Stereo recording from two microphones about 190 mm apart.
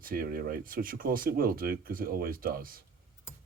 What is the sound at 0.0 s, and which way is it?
Speech, 50° right (ahead or behind).